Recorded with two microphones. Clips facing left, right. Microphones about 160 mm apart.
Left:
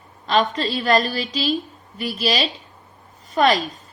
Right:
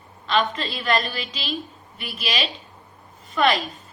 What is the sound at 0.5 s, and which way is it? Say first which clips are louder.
A woman's voice: left 5 dB; 35° left (ahead or behind).